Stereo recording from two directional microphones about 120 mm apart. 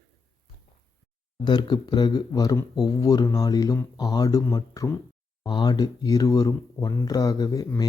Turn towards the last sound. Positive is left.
turn(degrees=30)  # may be behind; listen again after turning